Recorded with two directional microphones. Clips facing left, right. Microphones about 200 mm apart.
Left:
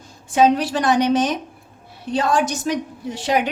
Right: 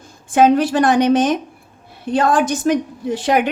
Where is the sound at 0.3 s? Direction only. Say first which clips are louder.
Right 4 dB; 55° right (ahead or behind).